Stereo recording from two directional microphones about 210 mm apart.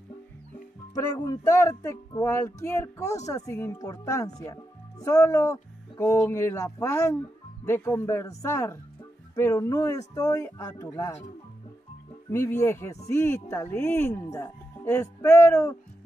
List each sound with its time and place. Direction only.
0.9 s speech: 15° left (ahead or behind)
12.3 s speech: 15° left (ahead or behind)